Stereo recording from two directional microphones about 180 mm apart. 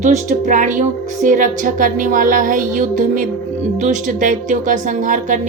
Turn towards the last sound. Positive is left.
turn(degrees=-45)  # may be behind; listen again after turning